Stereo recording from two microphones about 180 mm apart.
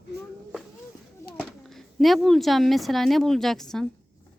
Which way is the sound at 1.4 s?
5° left (ahead or behind).